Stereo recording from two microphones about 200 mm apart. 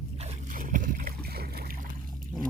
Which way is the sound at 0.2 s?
35° right (ahead or behind).